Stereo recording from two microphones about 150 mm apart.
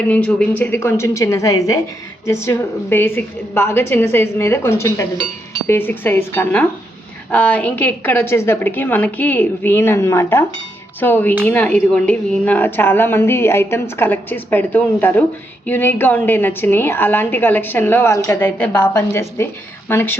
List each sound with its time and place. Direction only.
0.1 s speech: 5° left (ahead or behind)